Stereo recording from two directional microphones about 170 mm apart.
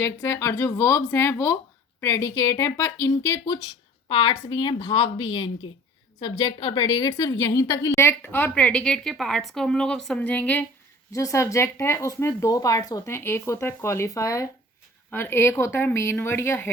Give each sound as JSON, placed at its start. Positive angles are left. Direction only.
{"t": 0.0, "sound": "a woman's voice", "side_deg": 15}